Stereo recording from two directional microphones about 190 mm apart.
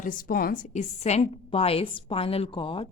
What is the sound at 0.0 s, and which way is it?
A woman's voice, 45° left (ahead or behind).